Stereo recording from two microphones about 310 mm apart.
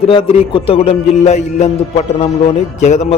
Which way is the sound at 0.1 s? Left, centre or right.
Centre.